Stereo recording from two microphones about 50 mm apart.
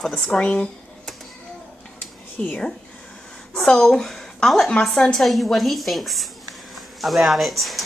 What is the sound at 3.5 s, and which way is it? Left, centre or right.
A woman's voice, centre.